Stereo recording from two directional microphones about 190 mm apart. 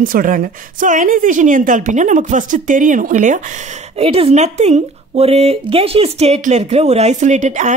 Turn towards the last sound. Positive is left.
turn(degrees=-40)  # may be behind; listen again after turning